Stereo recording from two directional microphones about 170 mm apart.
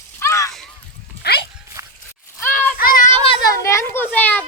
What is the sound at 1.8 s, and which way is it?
Dog, 20° right (ahead or behind).